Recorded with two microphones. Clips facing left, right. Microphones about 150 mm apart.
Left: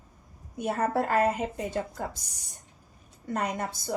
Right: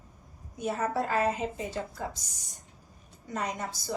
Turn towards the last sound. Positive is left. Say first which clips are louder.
# left 3 dB
turn(degrees=55)  # may be behind; listen again after turning